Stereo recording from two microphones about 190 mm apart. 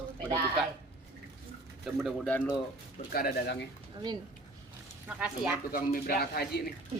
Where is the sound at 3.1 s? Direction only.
55° left (ahead or behind).